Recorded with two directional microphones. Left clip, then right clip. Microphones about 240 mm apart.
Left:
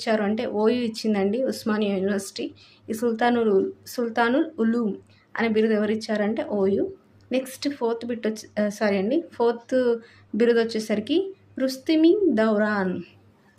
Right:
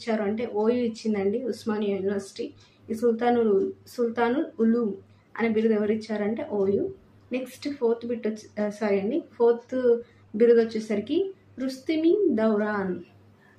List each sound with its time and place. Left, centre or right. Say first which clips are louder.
0.0 s speech: left 4 dB; left